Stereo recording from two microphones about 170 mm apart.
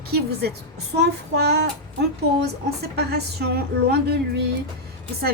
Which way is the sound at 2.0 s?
70° right (ahead or behind).